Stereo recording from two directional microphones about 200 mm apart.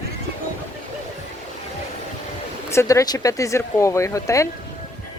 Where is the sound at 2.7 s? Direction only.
15° left (ahead or behind).